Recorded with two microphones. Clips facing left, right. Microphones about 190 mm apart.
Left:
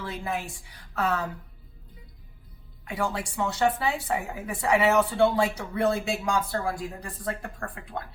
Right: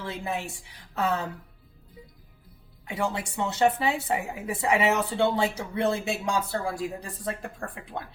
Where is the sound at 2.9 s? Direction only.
25° right (ahead or behind).